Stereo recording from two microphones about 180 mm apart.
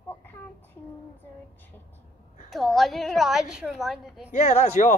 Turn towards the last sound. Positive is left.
turn(degrees=40)  # may be behind; listen again after turning